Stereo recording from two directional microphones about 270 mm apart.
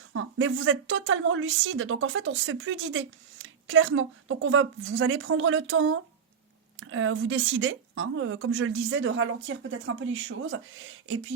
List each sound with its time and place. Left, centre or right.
0.1 s a woman's voice: right